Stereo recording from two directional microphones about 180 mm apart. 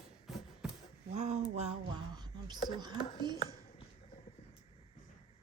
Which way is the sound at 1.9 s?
25° right (ahead or behind).